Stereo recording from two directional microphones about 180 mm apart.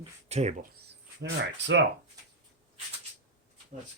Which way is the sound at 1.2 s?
75° right (ahead or behind).